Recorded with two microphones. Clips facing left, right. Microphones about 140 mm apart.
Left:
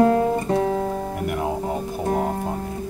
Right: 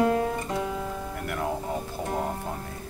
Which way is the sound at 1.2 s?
20° left (ahead or behind).